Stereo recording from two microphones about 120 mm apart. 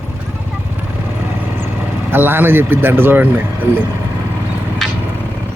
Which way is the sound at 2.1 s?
15° right (ahead or behind).